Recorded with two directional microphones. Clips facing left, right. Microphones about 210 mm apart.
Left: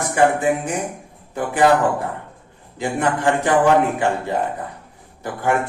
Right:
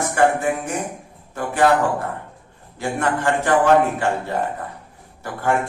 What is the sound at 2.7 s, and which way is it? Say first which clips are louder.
A man's voice: left 1 dB; 15° left (ahead or behind).